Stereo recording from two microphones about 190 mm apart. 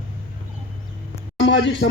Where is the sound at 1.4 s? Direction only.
70° left (ahead or behind).